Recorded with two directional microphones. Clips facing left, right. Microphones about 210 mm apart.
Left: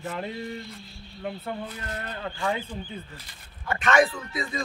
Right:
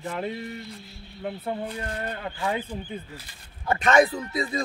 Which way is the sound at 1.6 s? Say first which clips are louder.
Right 4 dB; 30° right (ahead or behind).